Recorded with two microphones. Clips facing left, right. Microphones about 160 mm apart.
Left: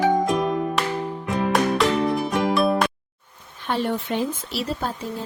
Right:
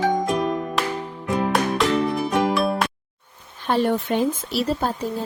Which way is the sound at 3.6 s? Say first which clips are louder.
Right 4 dB; 40° right (ahead or behind).